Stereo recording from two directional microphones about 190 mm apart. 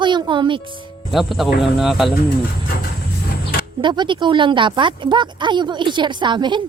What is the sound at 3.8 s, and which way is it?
Speech, 25° right (ahead or behind).